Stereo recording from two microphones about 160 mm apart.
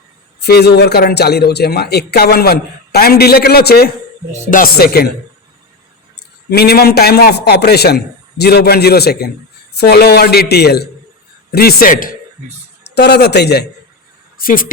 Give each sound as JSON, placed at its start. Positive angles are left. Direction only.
{"t": 0.3, "sound": "a man's voice", "side_deg": 90}
{"t": 4.5, "sound": "speech", "side_deg": 70}
{"t": 6.5, "sound": "a man's voice", "side_deg": 75}
{"t": 11.5, "sound": "a man's voice", "side_deg": 70}
{"t": 12.9, "sound": "a man's voice", "side_deg": 90}
{"t": 14.3, "sound": "a woman's voice", "side_deg": 60}